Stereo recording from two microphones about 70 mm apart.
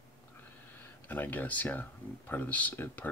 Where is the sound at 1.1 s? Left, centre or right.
Left.